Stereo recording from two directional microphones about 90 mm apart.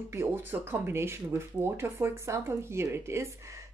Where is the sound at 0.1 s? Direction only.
25° right (ahead or behind).